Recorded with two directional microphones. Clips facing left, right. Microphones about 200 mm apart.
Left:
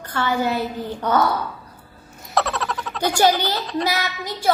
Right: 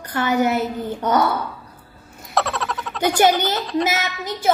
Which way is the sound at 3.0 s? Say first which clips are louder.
Right 2 dB; 20° right (ahead or behind).